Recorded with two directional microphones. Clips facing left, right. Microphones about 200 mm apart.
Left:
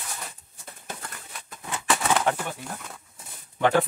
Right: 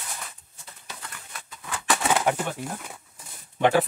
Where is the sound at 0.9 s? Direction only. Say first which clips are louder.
Left 5 dB; 50° left (ahead or behind).